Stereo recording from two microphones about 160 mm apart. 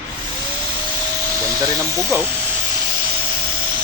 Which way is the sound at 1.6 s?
15° right (ahead or behind).